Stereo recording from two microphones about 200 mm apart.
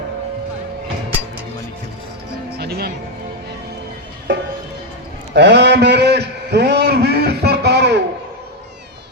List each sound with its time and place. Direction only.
2.6 s music: 50° right (ahead or behind)
4.3 s music: 65° right (ahead or behind)
5.3 s a sound: 60° right (ahead or behind)